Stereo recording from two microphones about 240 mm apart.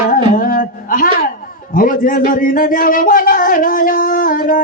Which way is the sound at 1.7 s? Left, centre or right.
Left.